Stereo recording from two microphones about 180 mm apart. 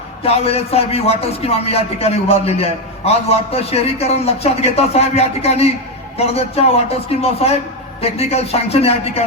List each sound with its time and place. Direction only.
0.2 s speech: 35° left (ahead or behind)